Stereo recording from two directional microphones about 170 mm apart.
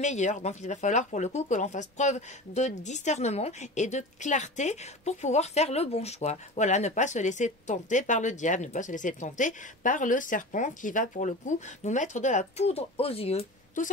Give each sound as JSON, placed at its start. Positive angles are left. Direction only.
{"t": 0.0, "sound": "speech", "side_deg": 45}
{"t": 13.8, "sound": "speech", "side_deg": 50}